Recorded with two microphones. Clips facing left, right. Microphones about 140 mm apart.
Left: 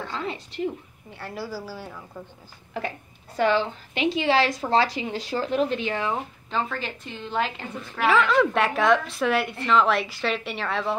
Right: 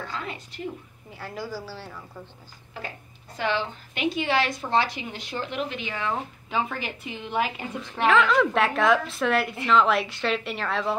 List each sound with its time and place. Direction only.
0.0 s a woman's voice: 30° left (ahead or behind)
1.1 s a woman's voice: centre (ahead or behind)
3.3 s a woman's voice: 40° left (ahead or behind)
6.5 s a woman's voice: 10° right (ahead or behind)
8.0 s a woman's voice: centre (ahead or behind)